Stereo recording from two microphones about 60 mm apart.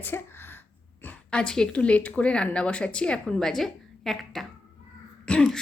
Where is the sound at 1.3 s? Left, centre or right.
Centre.